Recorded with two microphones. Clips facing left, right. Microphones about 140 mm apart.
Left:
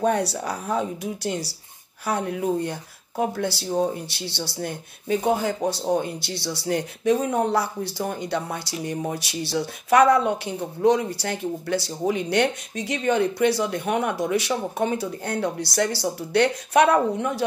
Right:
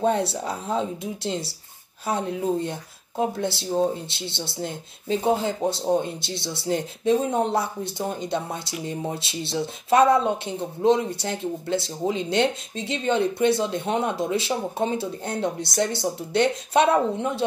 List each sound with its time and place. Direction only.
0.0 s speech: 25° right (ahead or behind)